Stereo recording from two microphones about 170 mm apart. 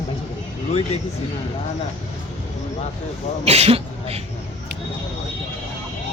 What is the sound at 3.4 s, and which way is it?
Throat clearing, 35° right (ahead or behind).